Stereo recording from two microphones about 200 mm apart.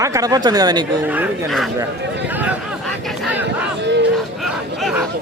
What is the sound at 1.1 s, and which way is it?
Speech, 5° right (ahead or behind).